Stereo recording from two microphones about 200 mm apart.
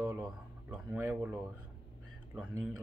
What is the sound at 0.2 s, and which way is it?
Speech, 5° right (ahead or behind).